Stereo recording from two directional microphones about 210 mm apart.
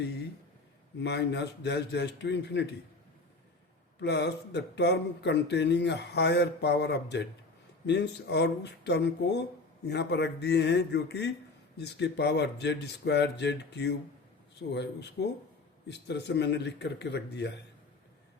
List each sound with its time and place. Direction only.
1.0 s speech: 55° left (ahead or behind)
4.0 s speech: 55° left (ahead or behind)